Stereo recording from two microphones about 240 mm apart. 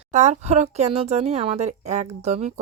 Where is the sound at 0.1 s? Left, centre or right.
Right.